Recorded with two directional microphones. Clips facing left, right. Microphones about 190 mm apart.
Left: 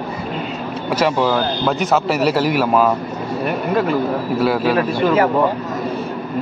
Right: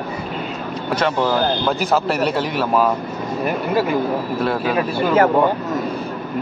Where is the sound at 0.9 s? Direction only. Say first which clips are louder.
Left 2 dB; 5° left (ahead or behind).